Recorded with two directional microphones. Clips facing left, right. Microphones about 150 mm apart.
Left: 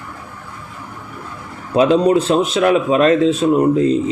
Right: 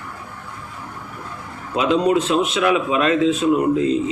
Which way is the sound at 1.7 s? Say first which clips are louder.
Left 5 dB; 35° left (ahead or behind).